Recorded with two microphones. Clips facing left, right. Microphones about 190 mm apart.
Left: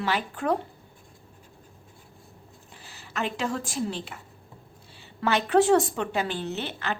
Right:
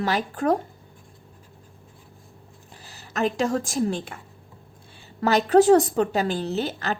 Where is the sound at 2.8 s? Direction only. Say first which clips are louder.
Right 6 dB; 40° right (ahead or behind).